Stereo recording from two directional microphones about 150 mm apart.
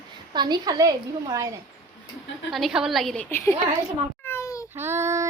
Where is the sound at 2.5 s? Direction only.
Centre (ahead or behind); by 3.5 s 15° left (ahead or behind).